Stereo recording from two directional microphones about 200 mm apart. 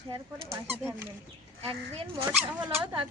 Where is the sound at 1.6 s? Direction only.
30° right (ahead or behind).